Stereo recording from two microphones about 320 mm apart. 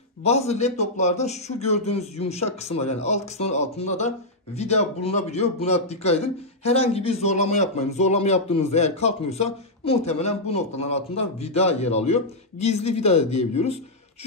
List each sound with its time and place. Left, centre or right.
0.2 s a man's voice: centre